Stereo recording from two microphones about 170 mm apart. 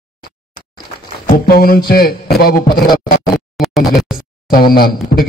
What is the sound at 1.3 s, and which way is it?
Music, 60° left (ahead or behind).